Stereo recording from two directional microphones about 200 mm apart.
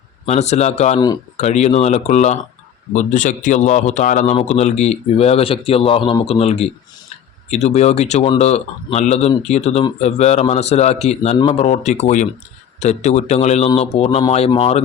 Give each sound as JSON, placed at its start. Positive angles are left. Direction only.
{"t": 0.3, "sound": "a man's voice", "side_deg": 35}
{"t": 0.9, "sound": "speech", "side_deg": 20}
{"t": 1.4, "sound": "a man's voice", "side_deg": 35}